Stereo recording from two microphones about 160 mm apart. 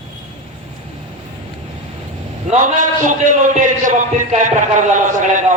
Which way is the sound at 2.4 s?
55° right (ahead or behind).